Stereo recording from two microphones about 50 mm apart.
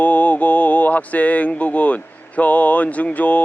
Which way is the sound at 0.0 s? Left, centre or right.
Left.